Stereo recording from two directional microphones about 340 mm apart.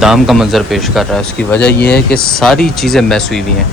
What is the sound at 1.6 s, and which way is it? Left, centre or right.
Speech, left.